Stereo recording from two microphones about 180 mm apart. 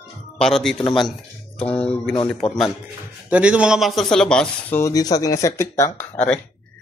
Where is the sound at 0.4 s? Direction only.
Centre (ahead or behind).